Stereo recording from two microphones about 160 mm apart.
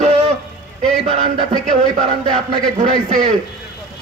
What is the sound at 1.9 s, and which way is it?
Speech, 50° right (ahead or behind).